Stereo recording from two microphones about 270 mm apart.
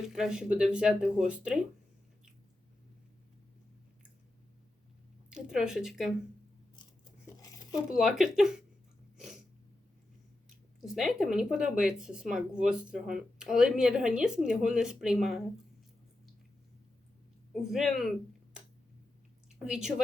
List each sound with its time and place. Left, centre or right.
0.1 s speech: centre
5.3 s speech: centre
7.4 s tearing: centre
7.9 s speech: centre
9.1 s a sound: centre
10.9 s speech: centre
17.5 s speech: centre
19.5 s a woman's voice: centre